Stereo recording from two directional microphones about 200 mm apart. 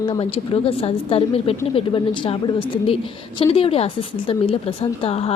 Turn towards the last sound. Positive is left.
turn(degrees=30)  # may be behind; listen again after turning